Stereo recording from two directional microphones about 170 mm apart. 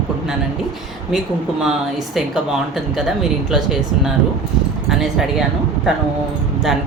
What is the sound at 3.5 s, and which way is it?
Speech, 5° right (ahead or behind).